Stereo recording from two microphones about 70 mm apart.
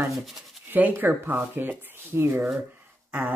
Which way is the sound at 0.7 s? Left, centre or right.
Right.